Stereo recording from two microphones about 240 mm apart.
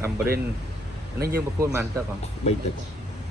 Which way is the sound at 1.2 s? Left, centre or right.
Right.